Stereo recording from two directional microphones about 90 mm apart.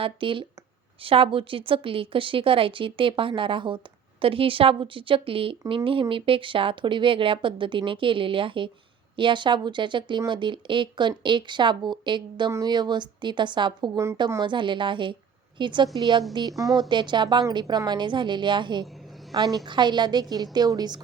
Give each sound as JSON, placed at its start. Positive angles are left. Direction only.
{"t": 0.0, "sound": "a woman's voice", "side_deg": -75}
{"t": 1.0, "sound": "a woman's voice", "side_deg": -90}
{"t": 4.2, "sound": "a woman's voice", "side_deg": -85}
{"t": 13.9, "sound": "speech", "side_deg": -35}
{"t": 14.4, "sound": "a woman's voice", "side_deg": -65}
{"t": 16.9, "sound": "speech", "side_deg": -60}
{"t": 19.3, "sound": "a woman's voice", "side_deg": -45}